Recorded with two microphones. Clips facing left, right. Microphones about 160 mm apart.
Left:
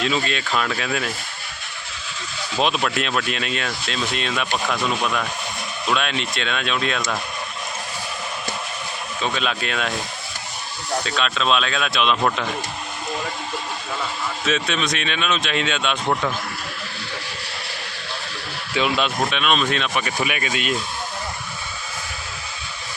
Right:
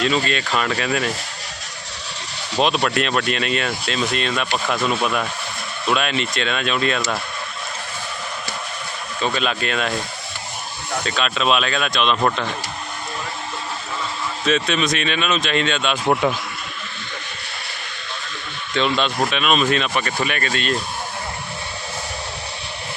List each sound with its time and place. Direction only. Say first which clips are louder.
0.0 s speech: right 3 dB; centre (ahead or behind)
2.8 s speech: right 3 dB; centre (ahead or behind)
9.2 s speech: right 3 dB; centre (ahead or behind)
11.0 s speech: right 4 dB; centre (ahead or behind)
14.4 s speech: right 4 dB; centre (ahead or behind)
16.2 s speech: right 5 dB; 15° right (ahead or behind)
18.7 s speech: right 1 dB; 5° left (ahead or behind)